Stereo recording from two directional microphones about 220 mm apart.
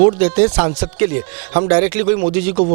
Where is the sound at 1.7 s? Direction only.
15° right (ahead or behind).